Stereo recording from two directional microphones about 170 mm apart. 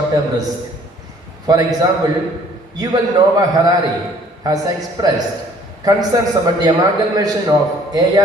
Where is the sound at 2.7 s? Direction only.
25° right (ahead or behind).